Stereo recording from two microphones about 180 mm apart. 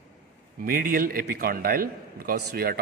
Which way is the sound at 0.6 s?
55° right (ahead or behind).